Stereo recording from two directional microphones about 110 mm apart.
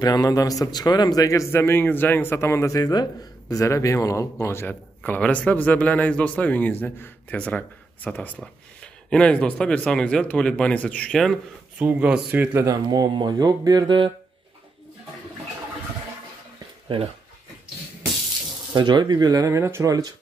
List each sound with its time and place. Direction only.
0.0 s a man's voice: 35° left (ahead or behind); by 11.3 s 5° left (ahead or behind)
11.8 s speech: 15° right (ahead or behind)
12.6 s speech: 35° right (ahead or behind)
18.7 s speech: 40° right (ahead or behind)